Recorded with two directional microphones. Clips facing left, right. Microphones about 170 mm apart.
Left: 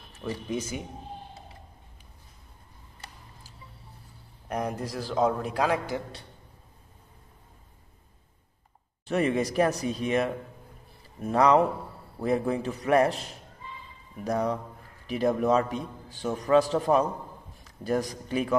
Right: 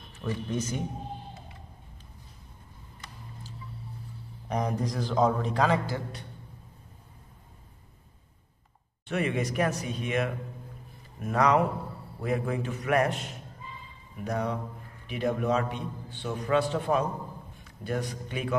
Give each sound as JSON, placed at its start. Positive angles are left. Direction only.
{"t": 0.5, "sound": "a man's voice", "side_deg": 10}
{"t": 4.5, "sound": "a man's voice", "side_deg": 5}
{"t": 9.0, "sound": "a man's voice", "side_deg": 35}